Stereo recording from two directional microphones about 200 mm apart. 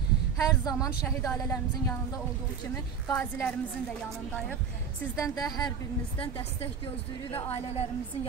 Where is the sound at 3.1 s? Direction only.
10° left (ahead or behind).